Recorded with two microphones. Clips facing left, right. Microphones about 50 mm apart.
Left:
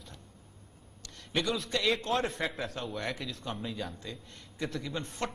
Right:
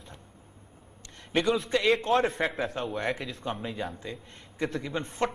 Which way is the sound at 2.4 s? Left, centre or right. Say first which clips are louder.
Right 5 dB; right.